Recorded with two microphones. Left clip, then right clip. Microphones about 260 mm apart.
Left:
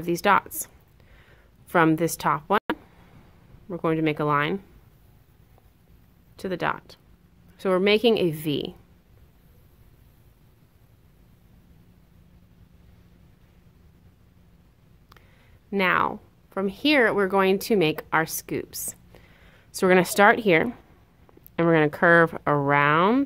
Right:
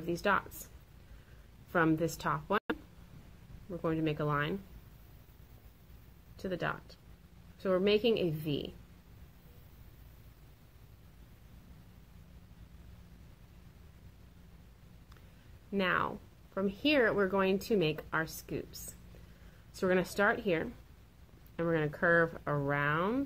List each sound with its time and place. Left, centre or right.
0.0 s speech: left
1.7 s a woman's voice: left
6.3 s speech: left
15.7 s speech: left